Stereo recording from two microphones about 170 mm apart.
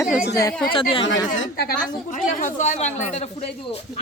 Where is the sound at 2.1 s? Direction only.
50° left (ahead or behind).